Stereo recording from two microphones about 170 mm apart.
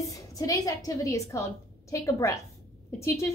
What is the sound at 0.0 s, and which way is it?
A woman's voice, 20° left (ahead or behind).